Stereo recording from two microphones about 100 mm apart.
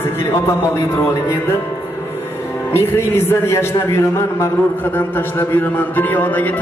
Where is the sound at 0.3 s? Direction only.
25° left (ahead or behind).